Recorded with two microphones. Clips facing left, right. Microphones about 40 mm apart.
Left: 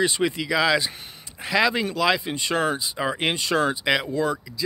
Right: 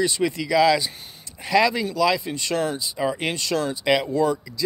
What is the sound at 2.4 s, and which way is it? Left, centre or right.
Speech, left.